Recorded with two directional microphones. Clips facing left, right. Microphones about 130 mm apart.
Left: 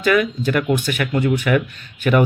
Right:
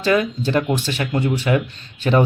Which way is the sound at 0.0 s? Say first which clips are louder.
Left 1 dB; 30° right (ahead or behind).